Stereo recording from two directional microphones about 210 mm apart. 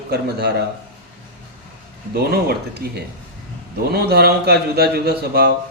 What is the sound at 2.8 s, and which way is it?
A man's voice, 45° right (ahead or behind).